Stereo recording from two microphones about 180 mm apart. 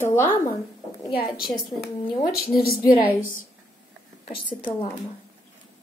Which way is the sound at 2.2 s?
55° left (ahead or behind).